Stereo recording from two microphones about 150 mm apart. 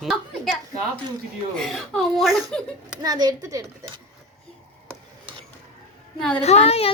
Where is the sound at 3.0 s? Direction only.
25° right (ahead or behind).